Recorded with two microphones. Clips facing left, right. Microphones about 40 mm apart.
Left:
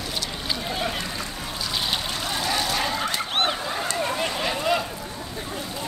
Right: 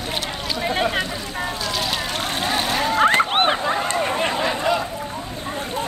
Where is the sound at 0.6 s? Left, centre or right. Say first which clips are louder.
Right 9 dB; right.